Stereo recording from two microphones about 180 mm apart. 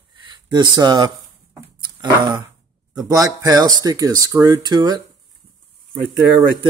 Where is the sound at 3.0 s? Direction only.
20° right (ahead or behind).